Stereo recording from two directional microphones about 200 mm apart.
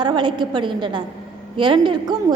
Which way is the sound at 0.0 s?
20° right (ahead or behind).